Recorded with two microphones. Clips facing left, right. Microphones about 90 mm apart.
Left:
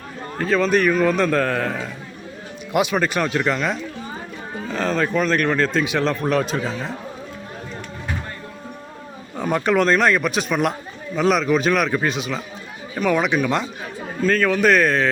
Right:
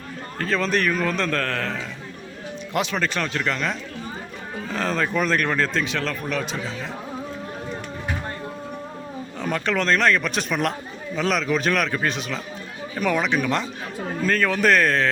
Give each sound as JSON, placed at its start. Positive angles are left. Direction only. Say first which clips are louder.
{"t": 0.3, "sound": "a man's voice", "louder": "left 5 dB", "side_deg": 5}
{"t": 6.2, "sound": "speech", "louder": "left 6 dB", "side_deg": 45}
{"t": 9.4, "sound": "a man's voice", "louder": "left 6 dB", "side_deg": 15}